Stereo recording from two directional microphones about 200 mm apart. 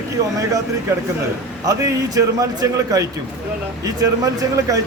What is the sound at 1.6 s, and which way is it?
Speech, 15° right (ahead or behind).